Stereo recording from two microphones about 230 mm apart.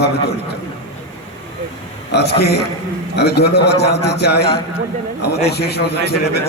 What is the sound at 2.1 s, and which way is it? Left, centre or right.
A man's voice, left.